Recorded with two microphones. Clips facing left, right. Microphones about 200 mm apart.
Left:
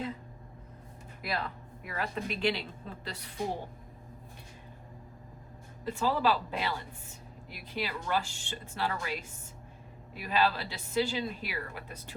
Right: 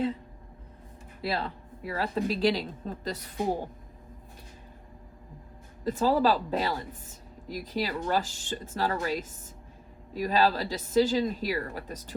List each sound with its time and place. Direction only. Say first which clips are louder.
1.2 s a woman's voice: right 4 dB; 30° right (ahead or behind)
5.8 s a woman's voice: right 5 dB; 40° right (ahead or behind)